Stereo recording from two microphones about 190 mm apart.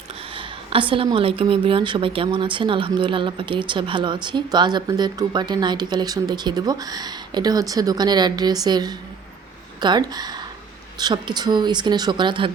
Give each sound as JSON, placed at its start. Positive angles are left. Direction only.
{"t": 0.3, "sound": "a woman's voice", "side_deg": -25}